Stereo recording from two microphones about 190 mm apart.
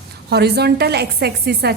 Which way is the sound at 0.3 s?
60° right (ahead or behind).